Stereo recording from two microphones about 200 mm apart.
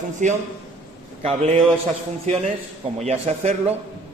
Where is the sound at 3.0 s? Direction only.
30° right (ahead or behind).